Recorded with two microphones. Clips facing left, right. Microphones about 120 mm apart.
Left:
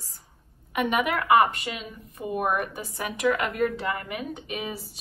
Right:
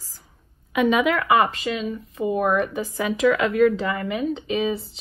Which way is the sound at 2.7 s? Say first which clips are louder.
Right 8 dB; 90° right.